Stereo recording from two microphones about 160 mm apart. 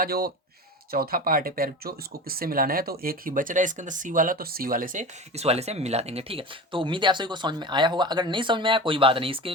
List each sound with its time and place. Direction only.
0.0 s speech: 75° right (ahead or behind); by 5.0 s 60° right (ahead or behind)
5.4 s speech: 40° right (ahead or behind)